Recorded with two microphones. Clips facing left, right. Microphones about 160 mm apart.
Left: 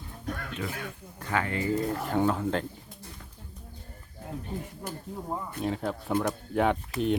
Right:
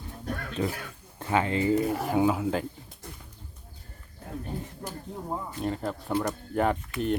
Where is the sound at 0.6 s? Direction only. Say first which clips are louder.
Right 8 dB; 35° right (ahead or behind).